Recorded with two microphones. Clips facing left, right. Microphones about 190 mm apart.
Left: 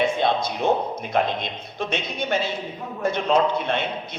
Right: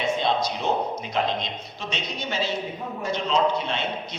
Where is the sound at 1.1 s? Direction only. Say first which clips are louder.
Left 3 dB; 55° left (ahead or behind).